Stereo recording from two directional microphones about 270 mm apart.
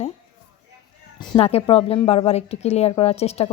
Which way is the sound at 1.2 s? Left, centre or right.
Left.